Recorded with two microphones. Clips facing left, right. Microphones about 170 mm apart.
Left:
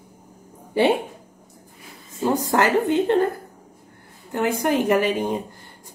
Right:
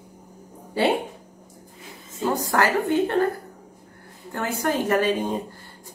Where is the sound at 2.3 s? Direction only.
20° left (ahead or behind).